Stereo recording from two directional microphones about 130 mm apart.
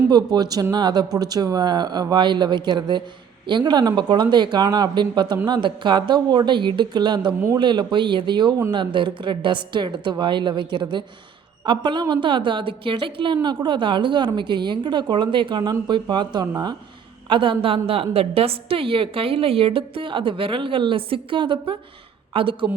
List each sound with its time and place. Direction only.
0.1 s a woman's voice: 30° right (ahead or behind)